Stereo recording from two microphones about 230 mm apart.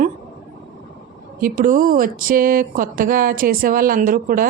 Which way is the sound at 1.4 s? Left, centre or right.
Right.